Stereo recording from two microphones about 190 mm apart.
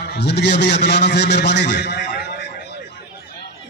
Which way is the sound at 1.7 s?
60° left (ahead or behind).